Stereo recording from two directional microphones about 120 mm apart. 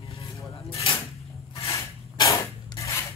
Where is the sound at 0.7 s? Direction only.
50° left (ahead or behind).